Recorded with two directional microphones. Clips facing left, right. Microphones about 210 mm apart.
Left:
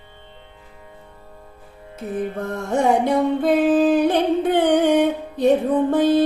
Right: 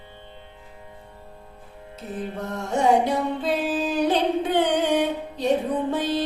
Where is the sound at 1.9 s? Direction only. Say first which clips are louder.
Left 6 dB; 55° left (ahead or behind).